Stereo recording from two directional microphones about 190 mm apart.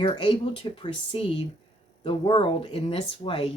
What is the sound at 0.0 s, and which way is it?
Speech, 25° left (ahead or behind).